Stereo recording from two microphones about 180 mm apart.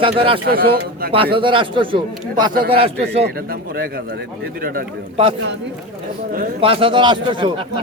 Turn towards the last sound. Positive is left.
turn(degrees=-30)  # may be behind; listen again after turning